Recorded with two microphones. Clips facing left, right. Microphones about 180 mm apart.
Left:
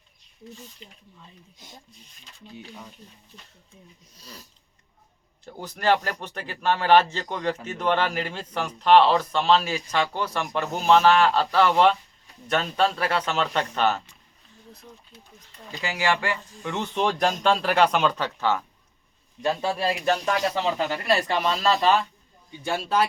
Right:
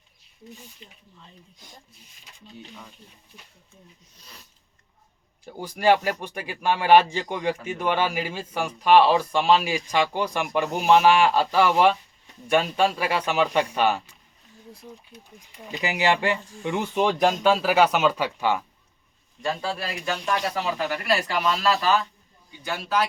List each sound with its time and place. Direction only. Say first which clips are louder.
5.5 s speech: right 3 dB; 10° right (ahead or behind)
19.4 s speech: left 3 dB; 20° left (ahead or behind)
19.8 s speech: left 6 dB; 40° left (ahead or behind)
20.7 s speech: left 1 dB; 20° left (ahead or behind)